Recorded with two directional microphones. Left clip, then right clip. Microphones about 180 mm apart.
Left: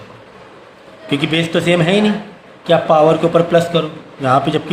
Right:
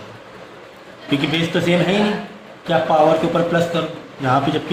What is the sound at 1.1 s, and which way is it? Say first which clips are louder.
Speech: left 3 dB; 55° left (ahead or behind).